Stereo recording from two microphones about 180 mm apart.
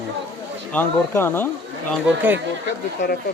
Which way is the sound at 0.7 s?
10° left (ahead or behind).